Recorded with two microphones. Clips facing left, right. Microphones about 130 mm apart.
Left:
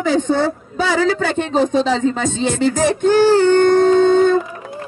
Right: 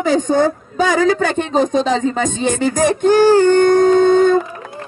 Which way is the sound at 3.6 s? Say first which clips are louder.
Right 1 dB; 45° right (ahead or behind).